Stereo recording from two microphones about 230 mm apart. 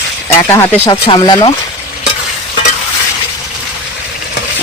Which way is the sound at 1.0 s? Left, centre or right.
Centre.